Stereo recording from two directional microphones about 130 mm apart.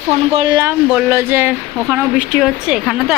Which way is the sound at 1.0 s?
15° right (ahead or behind).